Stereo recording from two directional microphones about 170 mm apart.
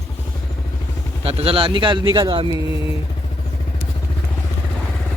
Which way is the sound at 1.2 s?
35° right (ahead or behind).